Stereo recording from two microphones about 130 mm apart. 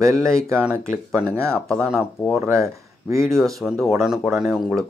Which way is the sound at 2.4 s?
20° right (ahead or behind).